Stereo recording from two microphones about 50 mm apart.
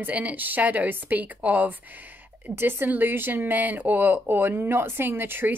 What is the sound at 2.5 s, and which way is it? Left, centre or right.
Speech, right.